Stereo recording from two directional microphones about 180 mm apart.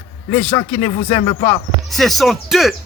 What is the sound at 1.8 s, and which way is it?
Speech, centre (ahead or behind).